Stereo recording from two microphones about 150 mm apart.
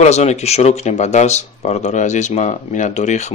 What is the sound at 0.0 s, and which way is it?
Speech, 50° left (ahead or behind).